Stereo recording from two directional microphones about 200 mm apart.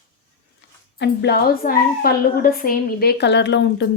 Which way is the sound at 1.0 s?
50° left (ahead or behind).